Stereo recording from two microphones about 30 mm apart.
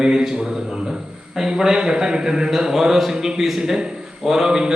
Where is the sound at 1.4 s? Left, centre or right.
Right.